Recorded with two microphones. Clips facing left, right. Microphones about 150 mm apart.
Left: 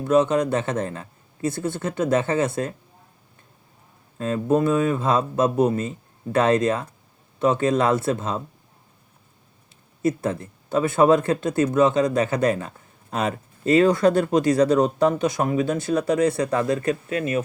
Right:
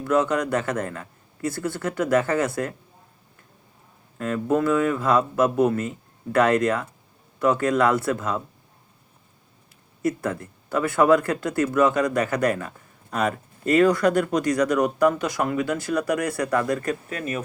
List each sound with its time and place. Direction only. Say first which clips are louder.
0.0 s speech: left 3 dB; 20° left (ahead or behind)
4.2 s speech: left 2 dB; 20° left (ahead or behind)
10.0 s speech: left 2 dB; 25° left (ahead or behind)